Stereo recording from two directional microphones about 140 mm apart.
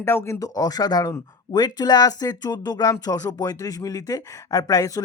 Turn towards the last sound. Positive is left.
turn(degrees=25)  # may be behind; listen again after turning